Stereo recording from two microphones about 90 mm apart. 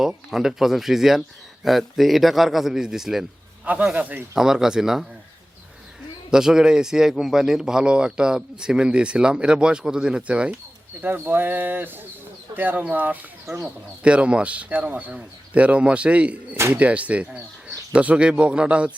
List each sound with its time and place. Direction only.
0.3 s a man's voice: 5° right (ahead or behind)
3.7 s a man's voice: 15° right (ahead or behind)
4.4 s a man's voice: 5° right (ahead or behind)
6.3 s a man's voice: 5° right (ahead or behind)